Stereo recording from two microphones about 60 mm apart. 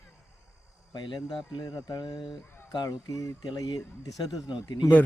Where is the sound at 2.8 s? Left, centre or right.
Left.